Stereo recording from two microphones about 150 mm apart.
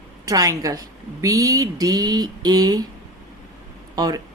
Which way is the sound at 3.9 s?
25° right (ahead or behind).